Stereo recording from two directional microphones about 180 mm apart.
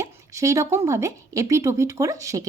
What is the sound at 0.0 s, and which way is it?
Speech, 15° right (ahead or behind).